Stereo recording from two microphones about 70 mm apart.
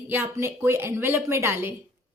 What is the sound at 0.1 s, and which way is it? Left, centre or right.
A woman's voice, right.